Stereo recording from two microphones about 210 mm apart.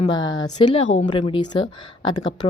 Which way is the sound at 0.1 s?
20° left (ahead or behind).